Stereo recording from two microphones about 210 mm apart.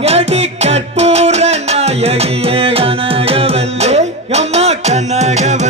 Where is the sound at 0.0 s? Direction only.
30° right (ahead or behind).